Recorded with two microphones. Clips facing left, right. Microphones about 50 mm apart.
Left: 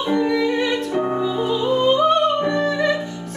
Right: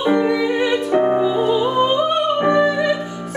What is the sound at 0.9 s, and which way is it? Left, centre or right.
Music, right.